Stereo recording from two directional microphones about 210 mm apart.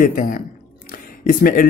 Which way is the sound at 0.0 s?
40° left (ahead or behind).